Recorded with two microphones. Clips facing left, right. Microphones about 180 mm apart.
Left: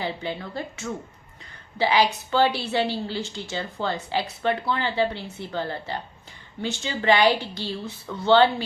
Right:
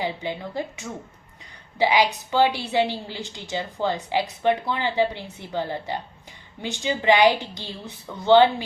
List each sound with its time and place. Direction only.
0.0 s a woman's voice: 15° right (ahead or behind)